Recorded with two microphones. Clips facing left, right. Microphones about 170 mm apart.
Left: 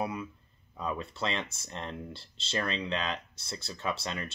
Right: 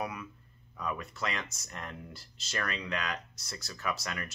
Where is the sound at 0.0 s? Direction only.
30° left (ahead or behind).